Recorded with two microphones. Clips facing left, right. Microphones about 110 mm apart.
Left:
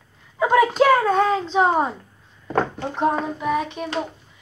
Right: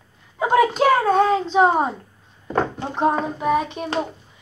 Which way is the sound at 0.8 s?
30° right (ahead or behind).